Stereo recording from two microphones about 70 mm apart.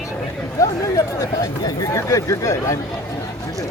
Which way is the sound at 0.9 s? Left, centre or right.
Left.